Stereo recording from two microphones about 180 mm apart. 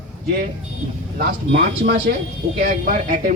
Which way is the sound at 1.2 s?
55° right (ahead or behind).